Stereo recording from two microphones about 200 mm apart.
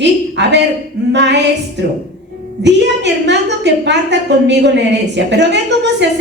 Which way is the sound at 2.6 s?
60° right (ahead or behind).